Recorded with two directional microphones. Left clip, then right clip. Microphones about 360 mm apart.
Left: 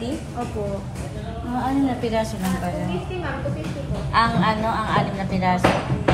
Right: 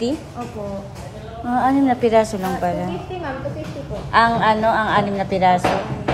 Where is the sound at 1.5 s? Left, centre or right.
Centre.